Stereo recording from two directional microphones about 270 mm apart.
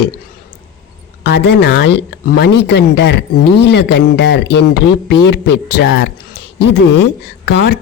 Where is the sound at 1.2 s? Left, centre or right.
Left.